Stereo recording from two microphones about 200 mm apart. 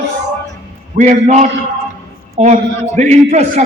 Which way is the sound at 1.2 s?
35° right (ahead or behind).